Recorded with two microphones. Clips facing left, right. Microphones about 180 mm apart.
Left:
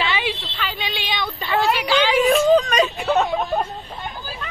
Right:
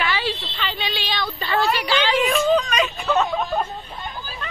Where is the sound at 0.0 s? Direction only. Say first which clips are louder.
Left 1 dB; 20° left (ahead or behind).